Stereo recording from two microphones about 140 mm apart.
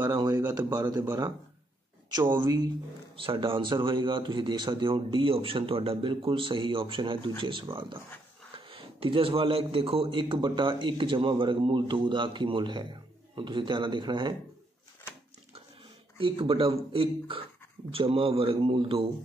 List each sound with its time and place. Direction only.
0.0 s a sound: 30° right (ahead or behind)
0.3 s a man's voice: 20° right (ahead or behind)
16.2 s a man's voice: 40° right (ahead or behind)